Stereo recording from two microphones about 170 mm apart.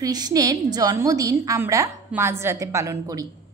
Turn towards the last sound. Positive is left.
turn(degrees=-20)  # may be behind; listen again after turning